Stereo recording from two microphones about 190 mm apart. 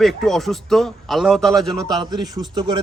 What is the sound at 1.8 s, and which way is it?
Speech, 20° right (ahead or behind).